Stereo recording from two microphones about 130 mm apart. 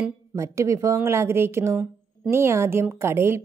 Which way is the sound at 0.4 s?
25° right (ahead or behind).